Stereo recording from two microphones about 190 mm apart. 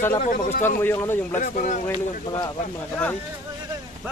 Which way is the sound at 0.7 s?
15° left (ahead or behind).